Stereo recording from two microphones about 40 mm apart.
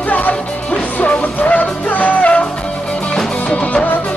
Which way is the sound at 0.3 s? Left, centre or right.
Left.